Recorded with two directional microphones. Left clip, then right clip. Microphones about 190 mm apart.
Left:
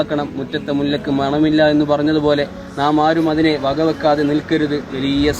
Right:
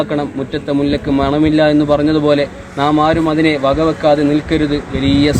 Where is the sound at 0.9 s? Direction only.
35° right (ahead or behind).